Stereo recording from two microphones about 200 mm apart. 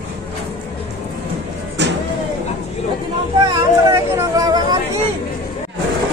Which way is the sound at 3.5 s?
20° right (ahead or behind).